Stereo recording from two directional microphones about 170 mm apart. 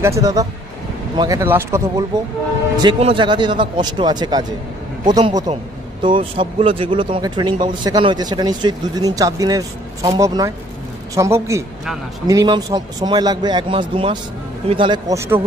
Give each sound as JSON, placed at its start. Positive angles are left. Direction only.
{"t": 0.0, "sound": "speech", "side_deg": -20}
{"t": 3.0, "sound": "speech", "side_deg": -30}
{"t": 15.1, "sound": "speech", "side_deg": -15}